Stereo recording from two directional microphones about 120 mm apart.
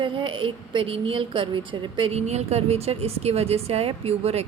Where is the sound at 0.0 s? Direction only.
45° right (ahead or behind).